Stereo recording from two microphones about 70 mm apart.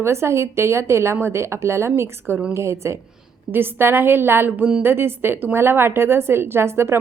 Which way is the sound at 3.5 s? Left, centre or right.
Right.